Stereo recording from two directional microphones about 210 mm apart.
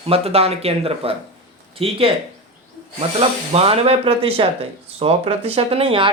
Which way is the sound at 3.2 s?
30° right (ahead or behind).